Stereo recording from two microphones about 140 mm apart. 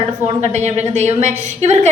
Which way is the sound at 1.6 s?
55° right (ahead or behind).